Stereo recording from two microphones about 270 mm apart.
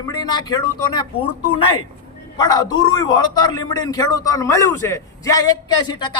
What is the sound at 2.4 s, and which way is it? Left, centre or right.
A man's voice, centre.